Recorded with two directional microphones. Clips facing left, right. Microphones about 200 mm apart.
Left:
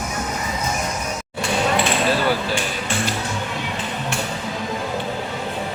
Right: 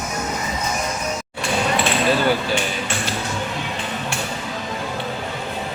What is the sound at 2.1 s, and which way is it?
Speech, centre (ahead or behind).